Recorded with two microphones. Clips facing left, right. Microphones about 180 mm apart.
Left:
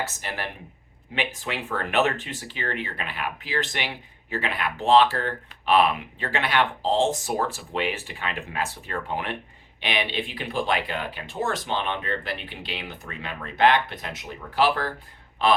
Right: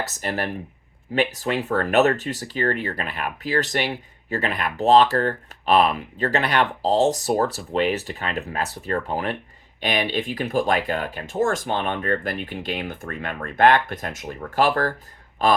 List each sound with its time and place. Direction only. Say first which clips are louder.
0.0 s speech: right 5 dB; 40° right (ahead or behind)